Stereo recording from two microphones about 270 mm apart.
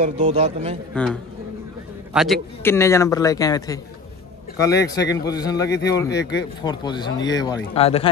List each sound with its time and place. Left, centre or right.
0.0 s a man's voice: right
1.0 s a man's voice: centre
2.1 s a man's voice: centre; by 8.1 s left